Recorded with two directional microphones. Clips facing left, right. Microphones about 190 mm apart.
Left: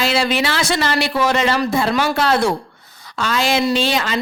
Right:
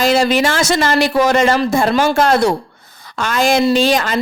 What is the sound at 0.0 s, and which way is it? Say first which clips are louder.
A woman's voice: right 5 dB; 45° right (ahead or behind).